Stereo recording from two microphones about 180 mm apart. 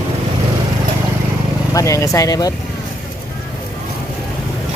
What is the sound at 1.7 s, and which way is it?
Speech, 15° left (ahead or behind).